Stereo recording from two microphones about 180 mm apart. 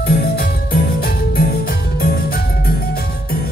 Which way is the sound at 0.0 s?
60° left (ahead or behind).